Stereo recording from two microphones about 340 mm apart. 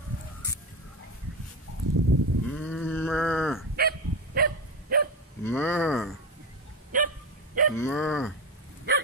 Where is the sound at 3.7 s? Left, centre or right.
Right.